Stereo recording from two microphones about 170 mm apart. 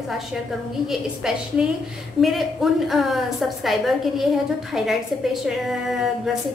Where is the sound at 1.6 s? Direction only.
5° right (ahead or behind).